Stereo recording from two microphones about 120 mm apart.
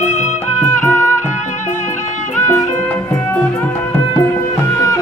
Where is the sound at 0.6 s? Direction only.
25° left (ahead or behind).